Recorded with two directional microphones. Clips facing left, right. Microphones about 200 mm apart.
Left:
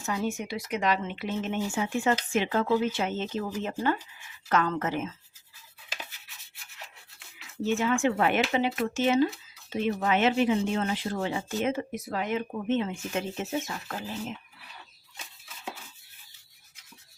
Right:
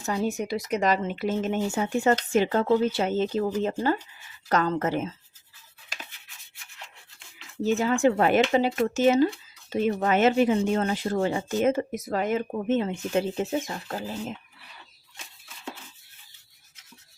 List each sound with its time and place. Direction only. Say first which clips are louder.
0.0 s speech: right 3 dB; 35° right (ahead or behind)
6.8 s a sound: right 1 dB; 5° left (ahead or behind)
7.6 s speech: right 4 dB; 35° right (ahead or behind)